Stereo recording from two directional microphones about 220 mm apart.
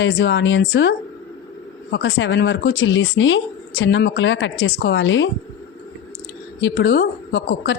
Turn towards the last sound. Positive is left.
turn(degrees=50)  # may be behind; listen again after turning